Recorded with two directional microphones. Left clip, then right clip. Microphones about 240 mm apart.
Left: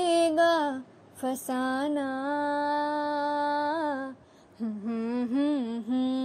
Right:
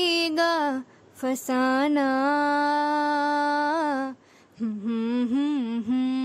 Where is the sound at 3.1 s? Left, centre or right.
Right.